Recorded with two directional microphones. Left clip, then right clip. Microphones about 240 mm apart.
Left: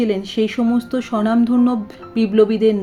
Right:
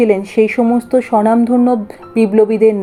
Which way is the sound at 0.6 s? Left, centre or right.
Centre.